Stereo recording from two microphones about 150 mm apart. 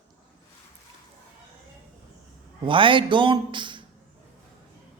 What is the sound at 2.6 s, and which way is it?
A man's voice, 35° right (ahead or behind).